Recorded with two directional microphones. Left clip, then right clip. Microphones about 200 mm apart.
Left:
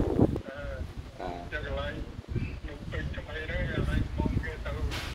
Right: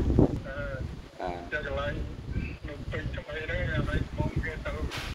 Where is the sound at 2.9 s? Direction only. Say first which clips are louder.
Right 2 dB; 50° right (ahead or behind).